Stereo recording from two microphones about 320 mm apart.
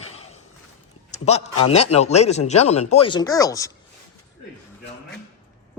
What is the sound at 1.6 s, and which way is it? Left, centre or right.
Speech, centre.